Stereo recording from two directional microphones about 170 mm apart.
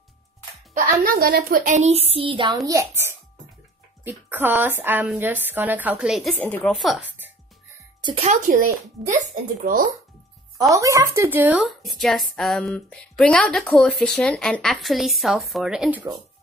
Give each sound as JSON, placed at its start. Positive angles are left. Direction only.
{"t": 1.0, "sound": "a woman's voice", "side_deg": -60}
{"t": 2.1, "sound": "speech", "side_deg": -30}
{"t": 2.6, "sound": "speech", "side_deg": -20}
{"t": 4.0, "sound": "a woman's voice", "side_deg": -10}
{"t": 8.0, "sound": "a child's voice", "side_deg": -35}
{"t": 10.6, "sound": "speech", "side_deg": -20}